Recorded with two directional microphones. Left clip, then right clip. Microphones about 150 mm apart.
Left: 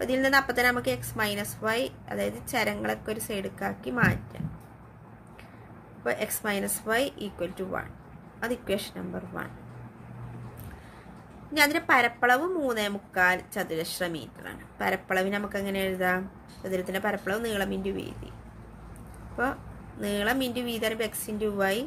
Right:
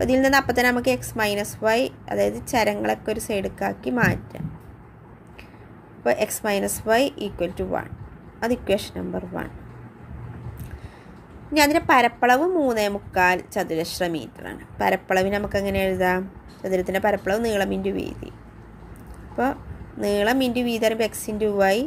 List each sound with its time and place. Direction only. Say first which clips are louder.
0.0 s a woman's voice: right 5 dB; 30° right (ahead or behind)
6.0 s a woman's voice: right 8 dB; 30° right (ahead or behind)
11.5 s a woman's voice: right 5 dB; 30° right (ahead or behind)
19.4 s a woman's voice: right 5 dB; 25° right (ahead or behind)